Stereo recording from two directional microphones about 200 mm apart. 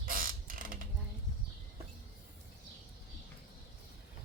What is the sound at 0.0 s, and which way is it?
Mechanisms, 45° right (ahead or behind).